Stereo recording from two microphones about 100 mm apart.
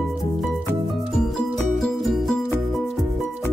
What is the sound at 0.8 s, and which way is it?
Music, centre (ahead or behind).